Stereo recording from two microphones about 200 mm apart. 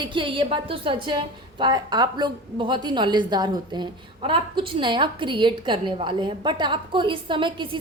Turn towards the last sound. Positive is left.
turn(degrees=-25)  # may be behind; listen again after turning